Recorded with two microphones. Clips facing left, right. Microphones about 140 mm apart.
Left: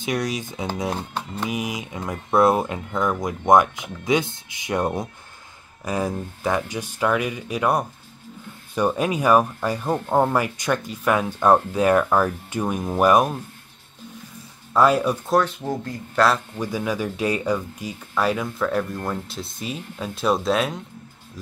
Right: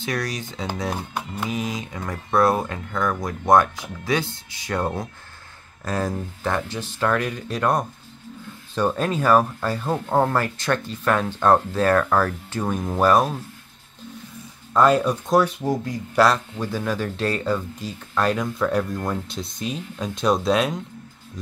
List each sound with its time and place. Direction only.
0.0 s speech: 20° left (ahead or behind)
0.9 s speech: 10° right (ahead or behind)
1.5 s speech: 15° left (ahead or behind)
14.7 s speech: 5° left (ahead or behind)
15.3 s speech: 10° right (ahead or behind)
16.3 s speech: 10° left (ahead or behind)